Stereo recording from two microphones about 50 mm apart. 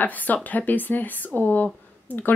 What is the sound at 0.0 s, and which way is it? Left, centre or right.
Speech, left.